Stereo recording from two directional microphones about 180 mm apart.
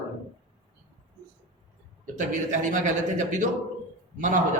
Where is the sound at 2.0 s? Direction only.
45° right (ahead or behind).